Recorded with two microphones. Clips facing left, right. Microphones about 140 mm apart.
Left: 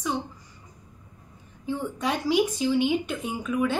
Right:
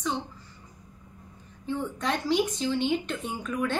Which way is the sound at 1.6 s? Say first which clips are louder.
Left 2 dB; 10° left (ahead or behind).